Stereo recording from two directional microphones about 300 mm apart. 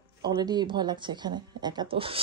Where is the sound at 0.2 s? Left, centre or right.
Centre.